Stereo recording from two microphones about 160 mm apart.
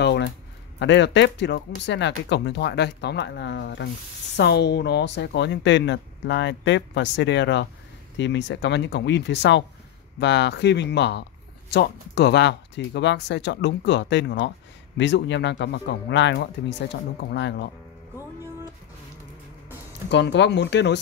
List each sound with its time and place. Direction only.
0.0 s a sound: 90° left
0.7 s speech: 90° left
18.1 s music: 15° right (ahead or behind)
20.1 s speech: 90° left